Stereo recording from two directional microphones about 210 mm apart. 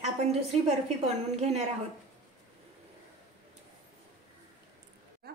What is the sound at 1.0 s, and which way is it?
Speech, 30° right (ahead or behind).